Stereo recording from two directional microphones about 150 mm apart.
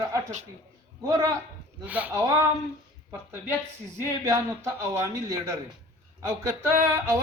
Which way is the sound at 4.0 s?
20° right (ahead or behind).